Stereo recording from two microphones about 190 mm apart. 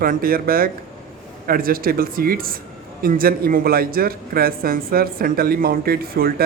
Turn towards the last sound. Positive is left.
turn(degrees=-50)  # may be behind; listen again after turning